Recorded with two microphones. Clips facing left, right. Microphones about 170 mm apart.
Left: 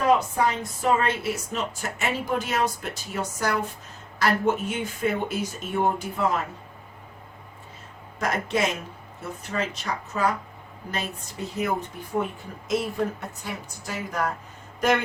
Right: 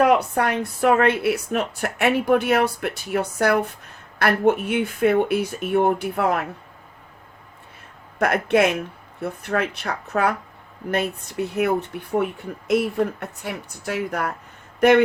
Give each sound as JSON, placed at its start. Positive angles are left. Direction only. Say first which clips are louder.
{"t": 0.0, "sound": "a woman's voice", "louder": "right 4 dB", "side_deg": -65}
{"t": 8.2, "sound": "a woman's voice", "louder": "right 7 dB", "side_deg": -60}